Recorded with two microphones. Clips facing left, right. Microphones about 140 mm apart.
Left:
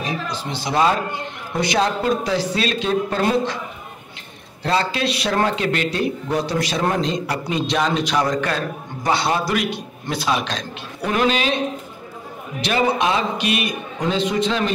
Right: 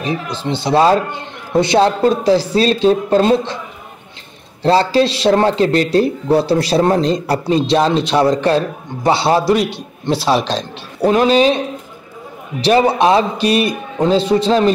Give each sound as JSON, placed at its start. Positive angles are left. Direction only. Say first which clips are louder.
{"t": 0.4, "sound": "a man's voice", "louder": "right 7 dB", "side_deg": -25}
{"t": 4.6, "sound": "speech", "louder": "right 8 dB", "side_deg": -30}
{"t": 12.6, "sound": "speech", "louder": "right 7 dB", "side_deg": -35}